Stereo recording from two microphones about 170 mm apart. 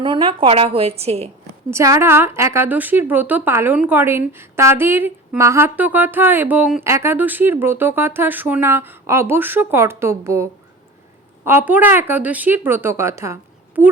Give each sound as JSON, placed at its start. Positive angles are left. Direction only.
{"t": 0.0, "sound": "a woman's voice", "side_deg": -30}
{"t": 1.7, "sound": "a woman's voice", "side_deg": -15}